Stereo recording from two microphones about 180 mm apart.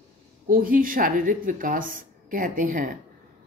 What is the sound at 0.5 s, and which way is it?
Speech, 50° right (ahead or behind).